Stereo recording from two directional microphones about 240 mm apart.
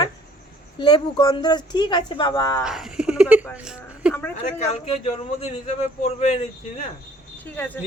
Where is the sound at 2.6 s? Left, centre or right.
Centre.